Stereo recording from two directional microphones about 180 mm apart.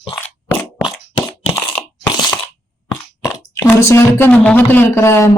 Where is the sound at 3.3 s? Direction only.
15° left (ahead or behind).